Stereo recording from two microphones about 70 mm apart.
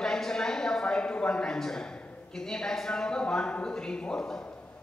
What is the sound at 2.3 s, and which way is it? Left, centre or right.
Speech, centre.